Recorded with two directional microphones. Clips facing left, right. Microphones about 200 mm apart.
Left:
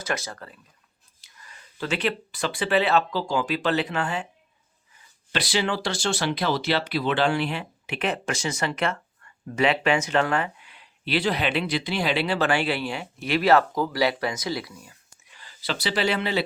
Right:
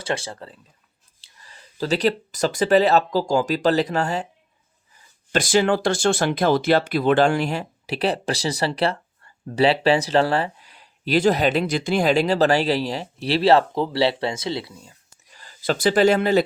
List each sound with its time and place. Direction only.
0.0 s speech: 30° right (ahead or behind)
5.3 s speech: 45° right (ahead or behind); by 14.9 s 25° right (ahead or behind)
15.3 s speech: 40° right (ahead or behind)